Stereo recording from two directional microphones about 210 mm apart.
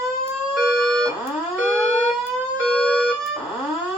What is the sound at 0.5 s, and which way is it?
Alarm, centre (ahead or behind).